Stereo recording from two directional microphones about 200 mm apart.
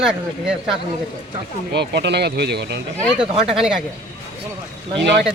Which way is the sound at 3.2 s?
5° right (ahead or behind).